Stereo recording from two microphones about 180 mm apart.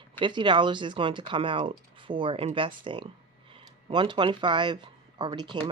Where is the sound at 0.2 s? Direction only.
25° right (ahead or behind).